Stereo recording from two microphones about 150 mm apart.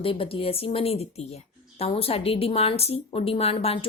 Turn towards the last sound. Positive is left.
turn(degrees=40)  # may be behind; listen again after turning